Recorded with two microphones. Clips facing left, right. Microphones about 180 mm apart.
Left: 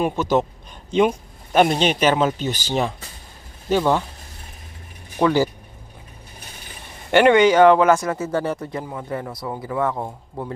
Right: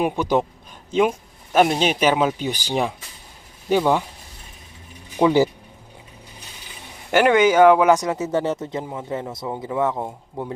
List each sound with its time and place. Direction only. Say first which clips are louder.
0.0 s speech: even; 15° right (ahead or behind)
5.1 s speech: right 2 dB; 20° right (ahead or behind)
7.1 s speech: left 2 dB; 5° right (ahead or behind)